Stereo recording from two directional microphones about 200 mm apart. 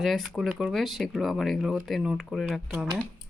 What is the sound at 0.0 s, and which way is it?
Speech, centre (ahead or behind).